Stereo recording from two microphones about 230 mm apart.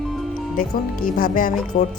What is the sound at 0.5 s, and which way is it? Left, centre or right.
Speech, left.